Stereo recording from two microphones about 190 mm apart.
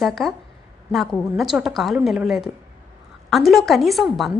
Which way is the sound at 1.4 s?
5° right (ahead or behind).